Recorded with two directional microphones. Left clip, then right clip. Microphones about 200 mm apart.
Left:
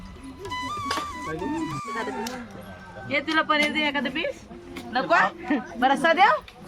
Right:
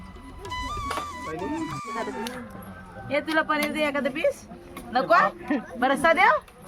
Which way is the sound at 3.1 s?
60° right (ahead or behind).